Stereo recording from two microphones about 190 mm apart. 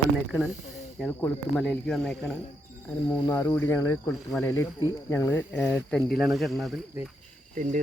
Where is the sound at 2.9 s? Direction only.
15° left (ahead or behind).